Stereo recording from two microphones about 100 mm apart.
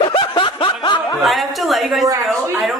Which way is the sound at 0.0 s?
60° left (ahead or behind).